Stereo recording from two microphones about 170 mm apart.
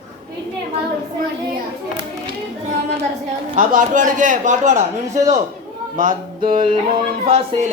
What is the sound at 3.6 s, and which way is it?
Speech, 50° right (ahead or behind).